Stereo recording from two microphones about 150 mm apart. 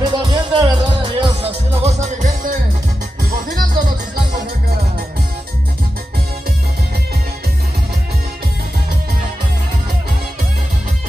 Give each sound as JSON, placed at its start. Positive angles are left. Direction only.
{"t": 0.0, "sound": "music", "side_deg": -30}
{"t": 1.8, "sound": "music", "side_deg": -50}
{"t": 3.3, "sound": "music", "side_deg": -70}